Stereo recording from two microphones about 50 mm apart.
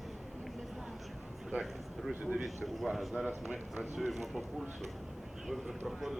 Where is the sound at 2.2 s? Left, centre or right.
Centre.